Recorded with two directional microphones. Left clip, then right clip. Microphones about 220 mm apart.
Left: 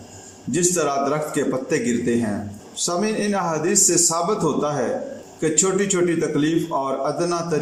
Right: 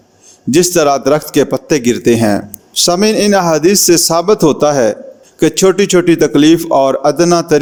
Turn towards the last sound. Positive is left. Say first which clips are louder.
# right 13 dB
turn(degrees=-50)  # may be behind; listen again after turning